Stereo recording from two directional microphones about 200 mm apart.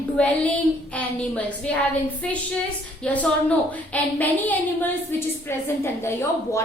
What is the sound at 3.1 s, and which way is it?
A woman's voice, 5° left (ahead or behind).